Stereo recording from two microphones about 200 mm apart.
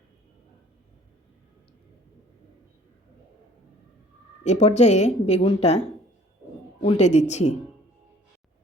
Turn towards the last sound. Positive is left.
turn(degrees=35)  # may be behind; listen again after turning